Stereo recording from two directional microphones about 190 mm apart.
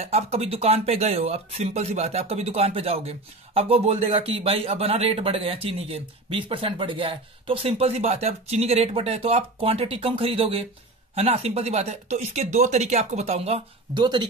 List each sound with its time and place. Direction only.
0.0 s speech: 35° right (ahead or behind)